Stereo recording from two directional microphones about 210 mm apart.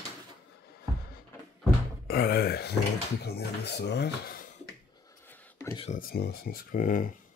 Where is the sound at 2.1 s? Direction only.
45° left (ahead or behind).